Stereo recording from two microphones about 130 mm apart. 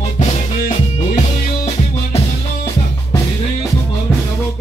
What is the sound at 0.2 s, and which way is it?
Music, 60° left (ahead or behind).